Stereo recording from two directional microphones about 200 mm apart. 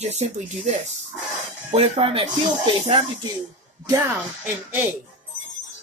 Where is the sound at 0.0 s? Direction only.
35° right (ahead or behind).